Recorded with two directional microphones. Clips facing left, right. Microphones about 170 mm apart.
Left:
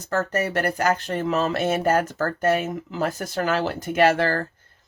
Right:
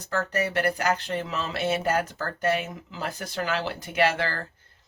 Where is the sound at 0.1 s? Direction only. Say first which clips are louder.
Left 3 dB; 45° left (ahead or behind).